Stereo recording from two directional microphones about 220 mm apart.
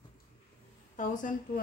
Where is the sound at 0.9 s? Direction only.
35° left (ahead or behind).